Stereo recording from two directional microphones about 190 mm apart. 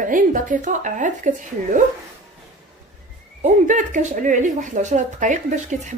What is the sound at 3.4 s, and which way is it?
Speech, 40° right (ahead or behind).